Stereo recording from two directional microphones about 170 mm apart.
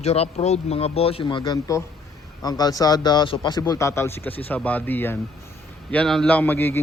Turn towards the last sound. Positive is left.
turn(degrees=10)  # may be behind; listen again after turning